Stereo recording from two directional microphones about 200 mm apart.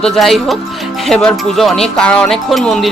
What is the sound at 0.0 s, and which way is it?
Speech, centre (ahead or behind).